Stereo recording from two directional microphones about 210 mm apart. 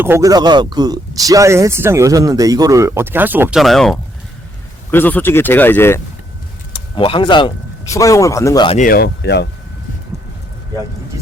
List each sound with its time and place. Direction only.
0.0 s a man's voice: 15° right (ahead or behind); by 6.0 s 10° left (ahead or behind)
6.9 s speech: 25° left (ahead or behind)
8.8 s speech: 45° left (ahead or behind)